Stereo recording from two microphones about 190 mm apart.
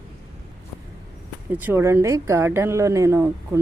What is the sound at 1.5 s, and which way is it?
A woman's voice, 10° right (ahead or behind).